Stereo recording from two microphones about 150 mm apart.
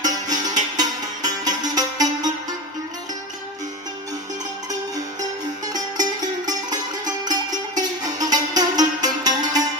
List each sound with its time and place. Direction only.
0.0 s music: 25° right (ahead or behind)
5.6 s music: 25° right (ahead or behind)
7.8 s music: 25° right (ahead or behind)